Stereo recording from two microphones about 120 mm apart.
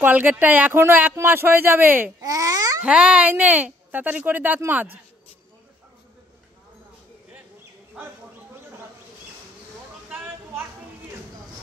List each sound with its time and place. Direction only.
0.0 s speech: 15° right (ahead or behind)
2.2 s babbling: 30° right (ahead or behind)
2.8 s speech: 10° right (ahead or behind)
8.0 s bird: 10° right (ahead or behind)
10.0 s a sound: 15° right (ahead or behind)